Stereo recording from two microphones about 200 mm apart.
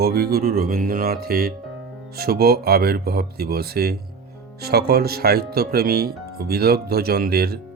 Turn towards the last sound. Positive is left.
turn(degrees=-50)  # may be behind; listen again after turning